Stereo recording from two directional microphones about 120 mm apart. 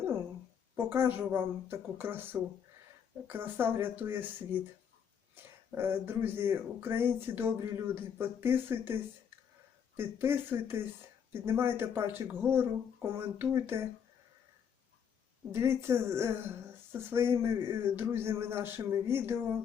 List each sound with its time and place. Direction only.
0.8 s speech: 20° right (ahead or behind)
10.0 s speech: 20° right (ahead or behind)
15.5 s speech: 20° right (ahead or behind)